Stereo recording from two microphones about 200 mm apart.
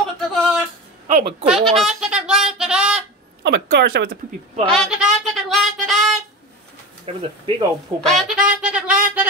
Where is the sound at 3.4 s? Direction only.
55° right (ahead or behind).